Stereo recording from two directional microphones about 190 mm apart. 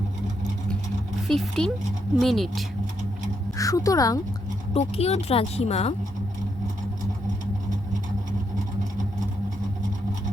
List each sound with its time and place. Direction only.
1.3 s speech: 5° left (ahead or behind)
3.6 s speech: 20° left (ahead or behind)
4.7 s speech: 35° left (ahead or behind)